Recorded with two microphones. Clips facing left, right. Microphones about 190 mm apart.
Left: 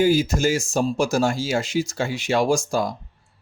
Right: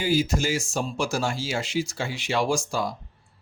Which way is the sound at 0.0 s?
45° left (ahead or behind).